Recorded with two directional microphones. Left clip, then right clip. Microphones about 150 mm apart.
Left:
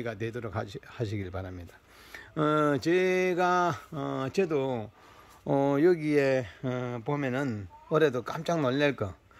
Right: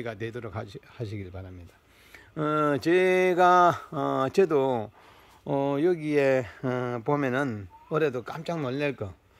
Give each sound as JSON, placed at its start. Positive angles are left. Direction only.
{"t": 0.0, "sound": "speech", "side_deg": -10}
{"t": 2.1, "sound": "a sound", "side_deg": -5}
{"t": 5.4, "sound": "speech", "side_deg": -5}
{"t": 6.2, "sound": "speech", "side_deg": -25}
{"t": 7.9, "sound": "speech", "side_deg": -10}